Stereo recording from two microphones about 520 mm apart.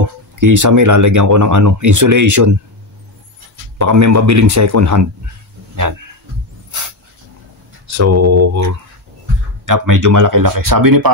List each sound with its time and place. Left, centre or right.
0.4 s speech: right
3.7 s speech: right
7.8 s a sound: right
9.7 s speech: right